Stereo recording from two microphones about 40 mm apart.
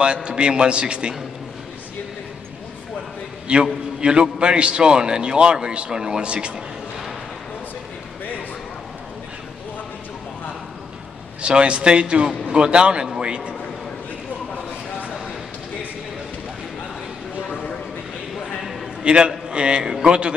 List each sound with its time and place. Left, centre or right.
0.0 s a man's voice: right
3.5 s a man's voice: right
11.4 s a man's voice: right
19.0 s a man's voice: right